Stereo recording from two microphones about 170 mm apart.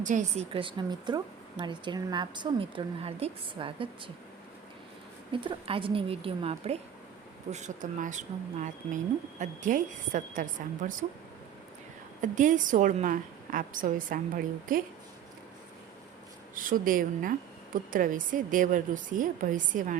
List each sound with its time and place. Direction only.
0.0 s a woman's voice: 45° right (ahead or behind)
0.5 s speech: 30° right (ahead or behind)
5.3 s a woman's voice: 30° right (ahead or behind)
7.5 s a woman's voice: 45° right (ahead or behind)
12.2 s a woman's voice: 50° right (ahead or behind)
16.6 s a woman's voice: 55° right (ahead or behind)